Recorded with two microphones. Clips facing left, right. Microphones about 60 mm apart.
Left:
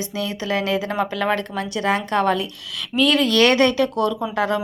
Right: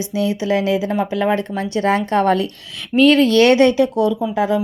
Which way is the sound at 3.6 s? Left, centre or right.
Right.